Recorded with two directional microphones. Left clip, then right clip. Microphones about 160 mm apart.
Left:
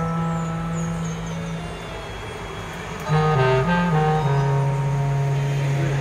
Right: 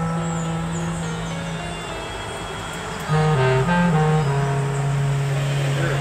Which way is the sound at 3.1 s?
Centre (ahead or behind).